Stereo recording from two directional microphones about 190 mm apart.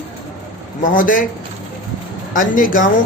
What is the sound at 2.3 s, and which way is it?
Speech, 45° left (ahead or behind).